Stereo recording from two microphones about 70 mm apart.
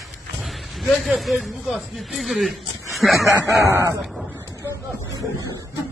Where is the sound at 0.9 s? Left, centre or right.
Centre.